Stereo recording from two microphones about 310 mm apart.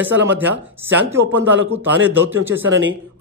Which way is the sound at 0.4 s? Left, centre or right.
Centre.